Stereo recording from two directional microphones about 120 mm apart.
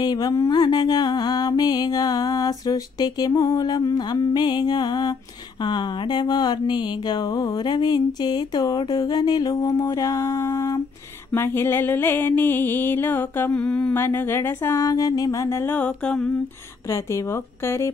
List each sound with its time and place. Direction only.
0.0 s mantra: 35° left (ahead or behind)
11.3 s music: 20° left (ahead or behind)
16.9 s speech: 25° left (ahead or behind)